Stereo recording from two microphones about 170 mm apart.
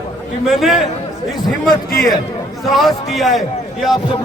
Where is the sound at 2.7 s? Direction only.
Centre (ahead or behind).